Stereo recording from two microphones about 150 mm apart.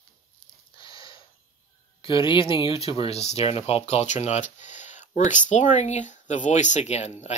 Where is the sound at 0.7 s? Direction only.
35° left (ahead or behind).